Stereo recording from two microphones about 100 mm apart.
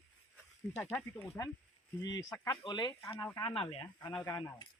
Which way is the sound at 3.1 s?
20° left (ahead or behind).